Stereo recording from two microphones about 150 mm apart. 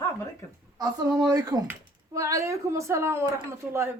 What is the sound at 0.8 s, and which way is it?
A woman's voice, 20° right (ahead or behind).